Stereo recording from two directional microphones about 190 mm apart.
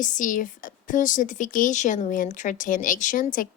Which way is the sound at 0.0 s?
45° left (ahead or behind).